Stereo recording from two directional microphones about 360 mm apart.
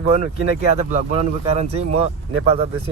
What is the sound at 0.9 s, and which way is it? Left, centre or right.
Speech, centre.